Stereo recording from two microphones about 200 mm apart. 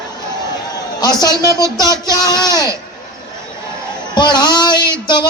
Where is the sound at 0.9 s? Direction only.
20° left (ahead or behind).